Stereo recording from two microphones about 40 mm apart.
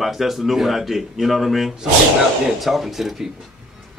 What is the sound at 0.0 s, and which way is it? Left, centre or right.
Speech, centre.